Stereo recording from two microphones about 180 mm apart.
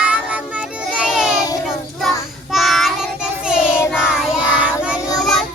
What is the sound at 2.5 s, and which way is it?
Child singing, centre (ahead or behind).